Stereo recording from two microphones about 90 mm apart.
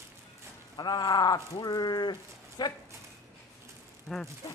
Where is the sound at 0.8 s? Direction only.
50° left (ahead or behind).